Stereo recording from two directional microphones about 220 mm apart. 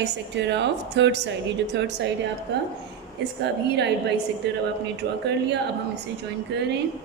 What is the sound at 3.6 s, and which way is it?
Speech, 50° right (ahead or behind).